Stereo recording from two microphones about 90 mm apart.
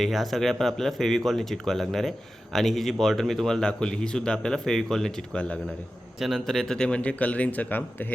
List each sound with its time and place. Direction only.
0.0 s speech: centre (ahead or behind)
6.1 s a man's voice: centre (ahead or behind); by 8.0 s 20° left (ahead or behind)